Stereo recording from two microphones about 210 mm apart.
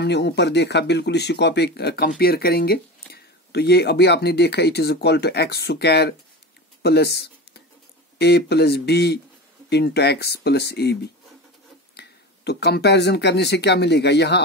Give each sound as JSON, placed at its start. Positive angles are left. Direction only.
{"t": 0.0, "sound": "speech", "side_deg": 55}